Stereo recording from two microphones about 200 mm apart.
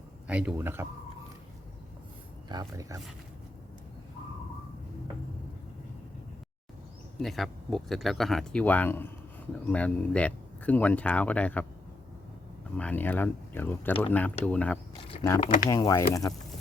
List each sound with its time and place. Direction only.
0.3 s speech: 5° right (ahead or behind)
2.5 s speech: 20° right (ahead or behind)
7.2 s speech: centre (ahead or behind)
12.7 s speech: 10° left (ahead or behind)
15.4 s speech: 40° left (ahead or behind)
15.7 s speech: 15° left (ahead or behind)